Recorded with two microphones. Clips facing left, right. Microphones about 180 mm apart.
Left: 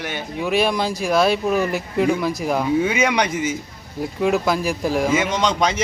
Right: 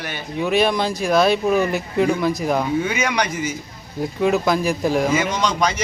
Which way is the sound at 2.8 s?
25° left (ahead or behind).